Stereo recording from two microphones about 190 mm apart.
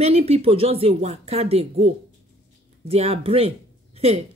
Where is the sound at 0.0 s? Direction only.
30° right (ahead or behind).